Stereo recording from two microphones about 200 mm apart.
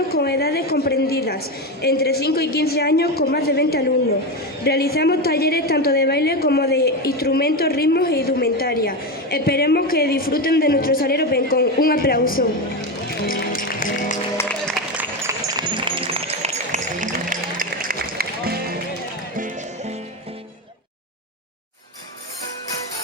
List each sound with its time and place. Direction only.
0.1 s a woman's voice: 50° left (ahead or behind)
13.1 s music: 45° left (ahead or behind)
14.3 s music: 10° left (ahead or behind)
14.9 s run: 15° right (ahead or behind); by 18.5 s 50° right (ahead or behind)